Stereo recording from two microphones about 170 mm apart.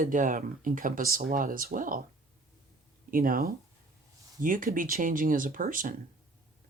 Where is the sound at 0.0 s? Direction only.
50° right (ahead or behind).